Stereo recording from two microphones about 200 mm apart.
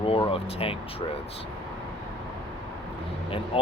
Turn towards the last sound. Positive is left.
turn(degrees=25)  # may be behind; listen again after turning